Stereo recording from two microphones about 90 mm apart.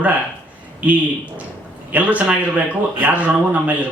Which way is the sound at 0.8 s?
15° right (ahead or behind).